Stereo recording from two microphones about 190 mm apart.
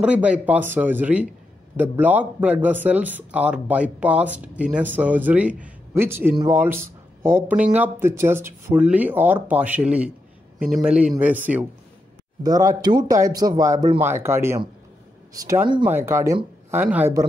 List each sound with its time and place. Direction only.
0.0 s speech: 5° right (ahead or behind)
12.4 s speech: 20° right (ahead or behind)